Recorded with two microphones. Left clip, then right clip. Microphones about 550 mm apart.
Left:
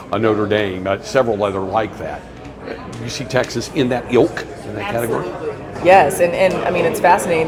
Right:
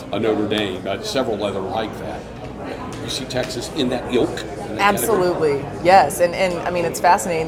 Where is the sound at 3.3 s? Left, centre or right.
Left.